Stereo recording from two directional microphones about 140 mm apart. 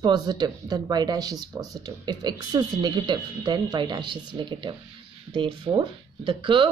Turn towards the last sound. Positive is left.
turn(degrees=-35)  # may be behind; listen again after turning